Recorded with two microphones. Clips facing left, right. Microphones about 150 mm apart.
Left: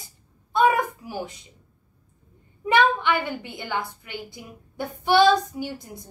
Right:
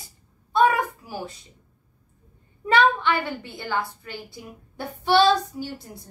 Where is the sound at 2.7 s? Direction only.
15° left (ahead or behind).